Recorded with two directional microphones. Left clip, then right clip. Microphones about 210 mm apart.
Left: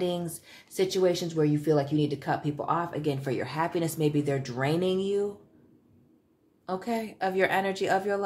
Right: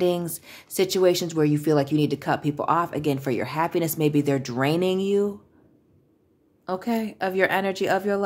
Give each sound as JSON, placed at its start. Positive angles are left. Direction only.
{"t": 0.0, "sound": "speech", "side_deg": -40}
{"t": 6.6, "sound": "speech", "side_deg": -35}